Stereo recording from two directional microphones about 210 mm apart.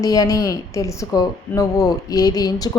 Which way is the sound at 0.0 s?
15° left (ahead or behind).